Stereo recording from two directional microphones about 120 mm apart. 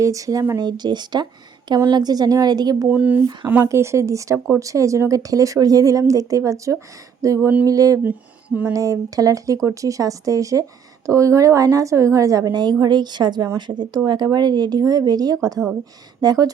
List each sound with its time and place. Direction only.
0.0 s speech: 30° right (ahead or behind)
2.8 s speech: 15° right (ahead or behind)
8.0 s speech: 10° right (ahead or behind)
8.7 s speech: 30° right (ahead or behind)